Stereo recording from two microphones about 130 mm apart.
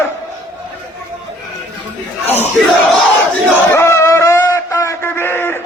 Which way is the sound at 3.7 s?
20° left (ahead or behind).